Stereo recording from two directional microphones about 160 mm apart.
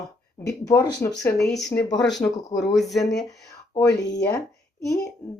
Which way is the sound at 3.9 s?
90° left.